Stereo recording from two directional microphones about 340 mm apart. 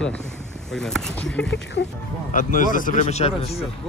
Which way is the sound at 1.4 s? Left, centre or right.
Left.